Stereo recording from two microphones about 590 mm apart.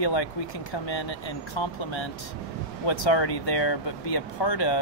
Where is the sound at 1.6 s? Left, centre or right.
Left.